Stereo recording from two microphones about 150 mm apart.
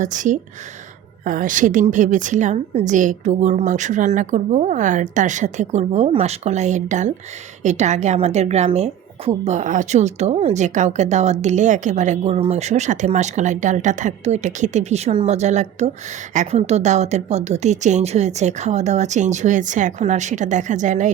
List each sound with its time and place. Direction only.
0.0 s a woman's voice: 55° right (ahead or behind)